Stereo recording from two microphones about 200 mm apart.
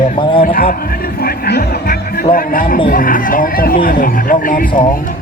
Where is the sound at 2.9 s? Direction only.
45° left (ahead or behind).